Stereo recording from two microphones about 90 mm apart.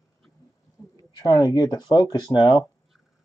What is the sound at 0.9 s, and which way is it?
Speech, 45° left (ahead or behind).